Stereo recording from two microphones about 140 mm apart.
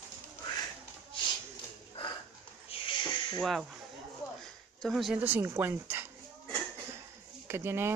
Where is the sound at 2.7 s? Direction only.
35° left (ahead or behind).